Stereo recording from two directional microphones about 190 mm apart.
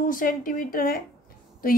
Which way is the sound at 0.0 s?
45° left (ahead or behind).